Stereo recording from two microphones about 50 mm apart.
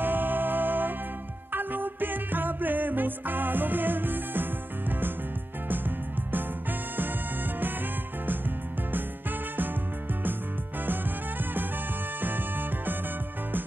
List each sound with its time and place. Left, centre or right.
0.0 s music: right
12.2 s music: right